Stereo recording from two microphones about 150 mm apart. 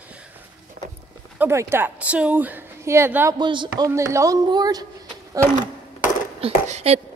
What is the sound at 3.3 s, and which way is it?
Speech, 30° right (ahead or behind).